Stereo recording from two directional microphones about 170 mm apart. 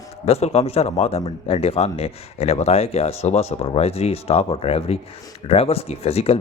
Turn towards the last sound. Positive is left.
turn(degrees=35)  # may be behind; listen again after turning